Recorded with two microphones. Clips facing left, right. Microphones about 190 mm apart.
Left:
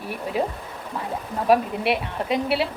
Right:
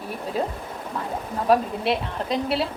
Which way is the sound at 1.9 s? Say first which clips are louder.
Left 1 dB; 10° left (ahead or behind).